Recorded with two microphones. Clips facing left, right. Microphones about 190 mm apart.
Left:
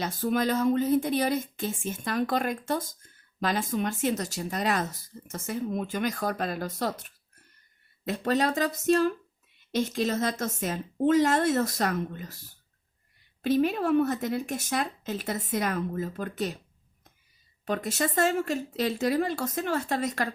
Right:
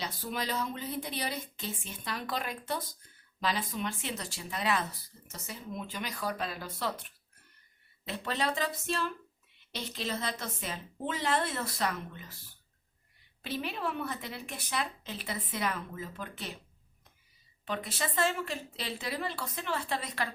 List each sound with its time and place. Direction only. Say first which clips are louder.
0.0 s speech: left 10 dB; 50° left (ahead or behind)
13.4 s speech: left 11 dB; 45° left (ahead or behind)
17.7 s speech: left 7 dB; 45° left (ahead or behind)